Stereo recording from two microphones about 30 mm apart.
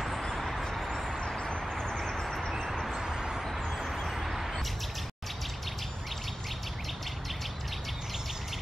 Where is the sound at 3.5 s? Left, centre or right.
Centre.